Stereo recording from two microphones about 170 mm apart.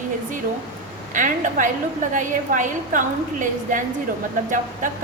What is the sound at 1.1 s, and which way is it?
A woman's voice, 50° right (ahead or behind).